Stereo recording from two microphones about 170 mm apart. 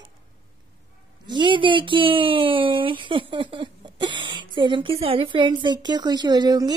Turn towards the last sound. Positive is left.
turn(degrees=-25)  # may be behind; listen again after turning